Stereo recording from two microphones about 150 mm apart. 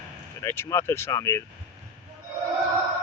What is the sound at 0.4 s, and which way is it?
Speech, 15° left (ahead or behind).